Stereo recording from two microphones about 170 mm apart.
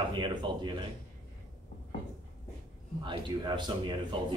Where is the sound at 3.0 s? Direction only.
30° right (ahead or behind).